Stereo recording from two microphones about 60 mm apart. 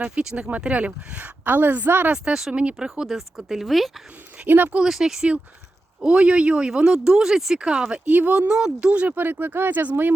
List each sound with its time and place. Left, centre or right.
0.2 s speech: right
2.1 s speech: centre
4.4 s speech: right
4.9 s speech: centre
8.0 s speech: right
8.4 s speech: centre; by 10.1 s right